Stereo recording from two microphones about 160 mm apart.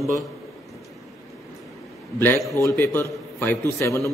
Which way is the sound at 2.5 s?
15° left (ahead or behind).